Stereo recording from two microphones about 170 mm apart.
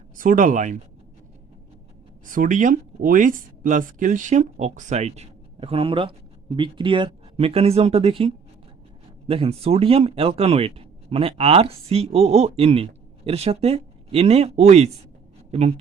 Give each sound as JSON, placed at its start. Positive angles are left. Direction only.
{"t": 0.2, "sound": "speech", "side_deg": -50}
{"t": 2.2, "sound": "speech", "side_deg": -50}